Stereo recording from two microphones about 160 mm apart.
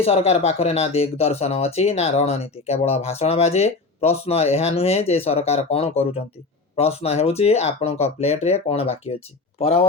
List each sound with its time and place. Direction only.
0.0 s speech: 40° left (ahead or behind)